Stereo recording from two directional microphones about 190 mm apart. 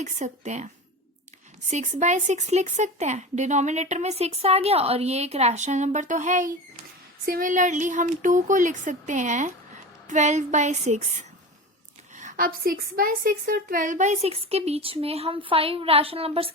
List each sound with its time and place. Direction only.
0.0 s speech: 40° right (ahead or behind)
1.7 s speech: 35° right (ahead or behind)